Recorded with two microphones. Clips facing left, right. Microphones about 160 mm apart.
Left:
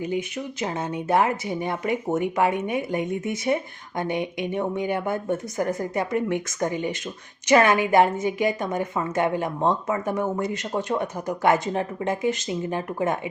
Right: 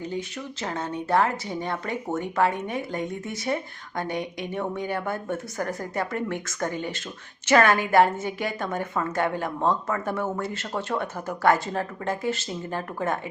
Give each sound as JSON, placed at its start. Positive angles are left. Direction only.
{"t": 0.0, "sound": "a woman's voice", "side_deg": 15}